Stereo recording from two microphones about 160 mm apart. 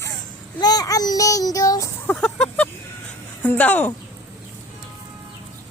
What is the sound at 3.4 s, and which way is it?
Speech, 10° left (ahead or behind).